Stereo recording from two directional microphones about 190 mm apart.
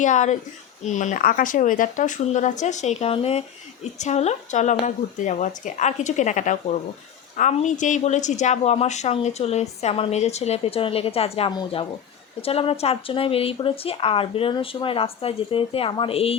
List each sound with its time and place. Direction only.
0.0 s a woman's voice: 40° left (ahead or behind)